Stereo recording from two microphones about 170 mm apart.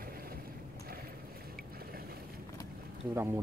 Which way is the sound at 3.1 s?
15° right (ahead or behind).